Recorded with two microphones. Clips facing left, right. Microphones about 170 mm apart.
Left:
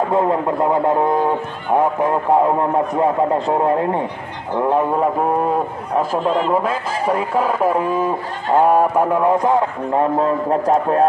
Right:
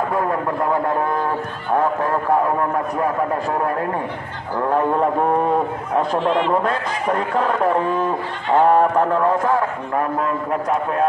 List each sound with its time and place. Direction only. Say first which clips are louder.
0.1 s a man's voice: left 4 dB; 25° left (ahead or behind)
5.9 s a man's voice: left 1 dB; 5° left (ahead or behind); by 11.1 s 35° left (ahead or behind)